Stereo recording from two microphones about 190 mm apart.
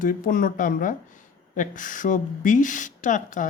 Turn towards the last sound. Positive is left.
turn(degrees=40)  # may be behind; listen again after turning